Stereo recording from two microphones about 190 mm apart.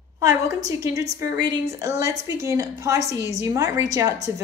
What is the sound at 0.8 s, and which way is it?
A woman's voice, 15° right (ahead or behind).